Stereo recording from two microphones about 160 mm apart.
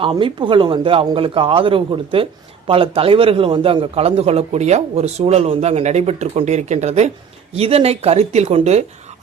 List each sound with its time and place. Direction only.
0.0 s a man's voice: 35° right (ahead or behind)